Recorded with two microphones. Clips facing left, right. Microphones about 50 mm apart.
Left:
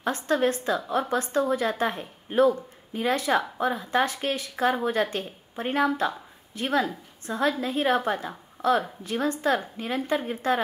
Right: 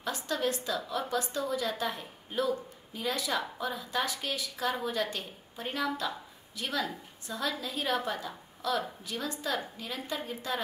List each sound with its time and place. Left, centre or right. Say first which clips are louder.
0.0 s a woman's voice: left 8 dB; left